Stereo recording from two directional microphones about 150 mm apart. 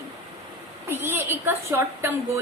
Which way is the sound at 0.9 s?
15° right (ahead or behind).